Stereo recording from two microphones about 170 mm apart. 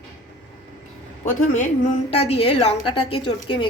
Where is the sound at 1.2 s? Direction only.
45° left (ahead or behind).